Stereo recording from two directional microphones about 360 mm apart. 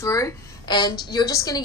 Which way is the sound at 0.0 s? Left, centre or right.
Centre.